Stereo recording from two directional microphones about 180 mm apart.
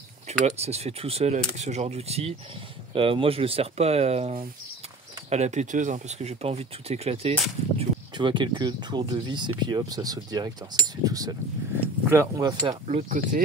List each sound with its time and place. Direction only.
0.3 s speech: 35° right (ahead or behind); by 12.7 s 20° right (ahead or behind)
12.8 s speech: 45° right (ahead or behind)